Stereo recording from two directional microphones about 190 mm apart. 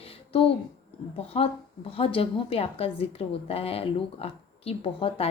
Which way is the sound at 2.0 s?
30° left (ahead or behind).